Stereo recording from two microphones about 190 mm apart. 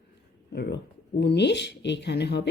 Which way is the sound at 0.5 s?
60° left (ahead or behind).